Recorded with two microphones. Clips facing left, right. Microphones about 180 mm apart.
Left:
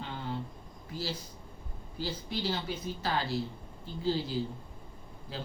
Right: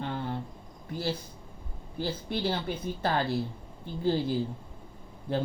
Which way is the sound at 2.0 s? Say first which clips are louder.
Right 4 dB; 55° right (ahead or behind).